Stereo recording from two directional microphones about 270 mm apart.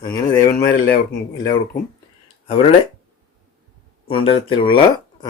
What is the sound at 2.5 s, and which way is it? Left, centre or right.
Speech, left.